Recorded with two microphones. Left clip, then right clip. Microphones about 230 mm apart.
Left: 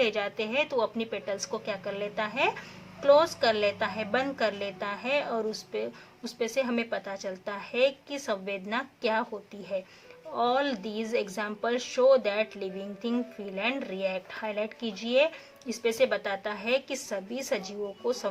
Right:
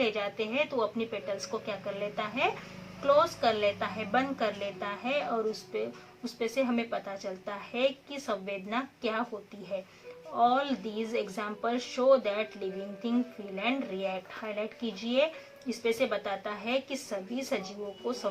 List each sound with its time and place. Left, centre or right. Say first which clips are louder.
0.0 s speech: left 3 dB; left
10.3 s speech: even; left